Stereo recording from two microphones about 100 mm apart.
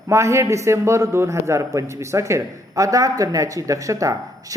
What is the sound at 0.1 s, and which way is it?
A man's voice, 30° right (ahead or behind).